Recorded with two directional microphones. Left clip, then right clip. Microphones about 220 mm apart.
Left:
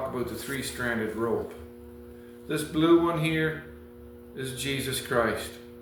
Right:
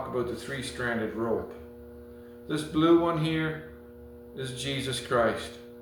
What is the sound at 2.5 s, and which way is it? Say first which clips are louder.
A man's voice: left 1 dB; 15° right (ahead or behind).